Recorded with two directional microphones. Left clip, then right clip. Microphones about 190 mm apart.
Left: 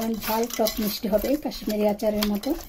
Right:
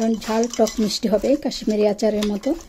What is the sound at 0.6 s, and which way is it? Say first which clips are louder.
Speech: right 5 dB; 45° right (ahead or behind).